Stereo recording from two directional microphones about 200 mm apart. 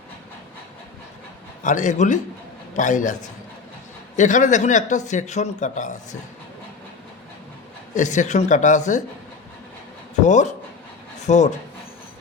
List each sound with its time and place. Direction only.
1.6 s a man's voice: 40° left (ahead or behind)
7.9 s a man's voice: 40° left (ahead or behind)
10.2 s speech: 35° left (ahead or behind)